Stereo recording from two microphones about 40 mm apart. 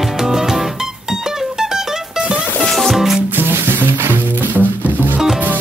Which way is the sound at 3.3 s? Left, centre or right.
Right.